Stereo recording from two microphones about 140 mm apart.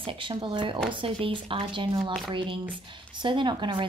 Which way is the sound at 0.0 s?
35° right (ahead or behind).